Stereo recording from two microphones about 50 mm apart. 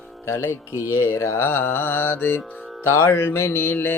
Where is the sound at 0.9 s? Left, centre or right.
Left.